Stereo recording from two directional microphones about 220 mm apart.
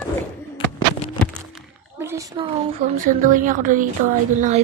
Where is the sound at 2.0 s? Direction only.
15° right (ahead or behind).